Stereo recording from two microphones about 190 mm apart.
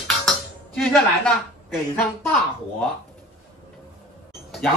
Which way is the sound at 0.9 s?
Centre (ahead or behind).